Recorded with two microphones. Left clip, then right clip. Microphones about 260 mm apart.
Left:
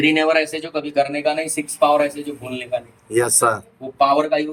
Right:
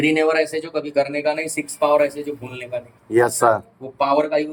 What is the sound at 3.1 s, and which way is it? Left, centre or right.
Speech, centre.